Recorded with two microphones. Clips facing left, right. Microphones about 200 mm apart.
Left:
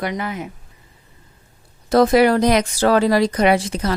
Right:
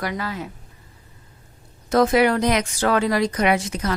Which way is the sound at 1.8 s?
35° left (ahead or behind).